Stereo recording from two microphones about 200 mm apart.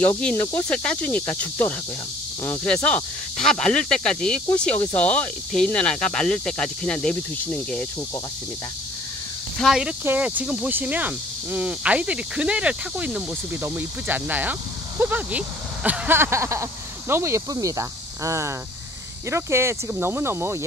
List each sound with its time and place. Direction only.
0.0 s speech: 5° left (ahead or behind)
9.6 s speech: centre (ahead or behind)